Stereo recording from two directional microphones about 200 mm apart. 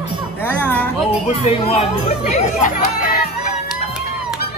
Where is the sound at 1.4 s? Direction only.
30° left (ahead or behind).